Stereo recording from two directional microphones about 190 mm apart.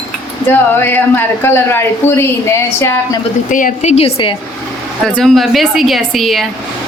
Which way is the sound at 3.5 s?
45° left (ahead or behind).